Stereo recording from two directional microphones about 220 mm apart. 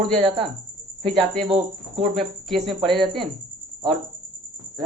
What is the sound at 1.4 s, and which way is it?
Speech, 25° right (ahead or behind).